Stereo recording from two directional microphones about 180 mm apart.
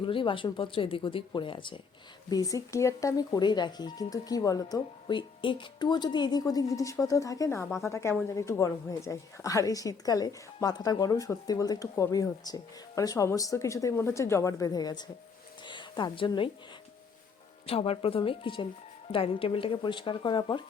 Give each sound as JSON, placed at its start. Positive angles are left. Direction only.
{"t": 0.0, "sound": "a woman's voice", "side_deg": 30}
{"t": 15.6, "sound": "a sound", "side_deg": 25}
{"t": 17.7, "sound": "a woman's voice", "side_deg": 30}